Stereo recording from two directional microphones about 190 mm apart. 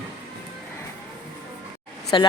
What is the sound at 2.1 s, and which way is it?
Speech, 25° left (ahead or behind).